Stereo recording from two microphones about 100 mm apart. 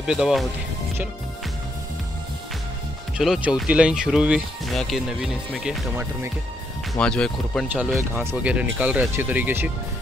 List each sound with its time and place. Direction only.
0.0 s speech: 5° right (ahead or behind)
3.2 s speech: 5° right (ahead or behind)
7.0 s speech: 5° left (ahead or behind)
7.6 s speech: 15° right (ahead or behind)